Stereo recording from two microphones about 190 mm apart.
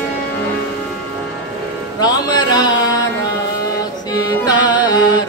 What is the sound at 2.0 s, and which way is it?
Music, 20° left (ahead or behind).